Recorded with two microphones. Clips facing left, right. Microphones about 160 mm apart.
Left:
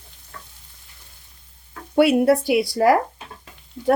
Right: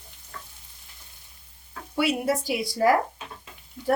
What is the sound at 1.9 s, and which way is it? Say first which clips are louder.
A woman's voice: left 9 dB; 60° left (ahead or behind).